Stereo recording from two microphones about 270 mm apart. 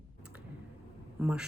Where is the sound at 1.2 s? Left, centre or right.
Centre.